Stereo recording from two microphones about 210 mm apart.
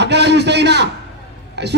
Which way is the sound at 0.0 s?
55° right (ahead or behind).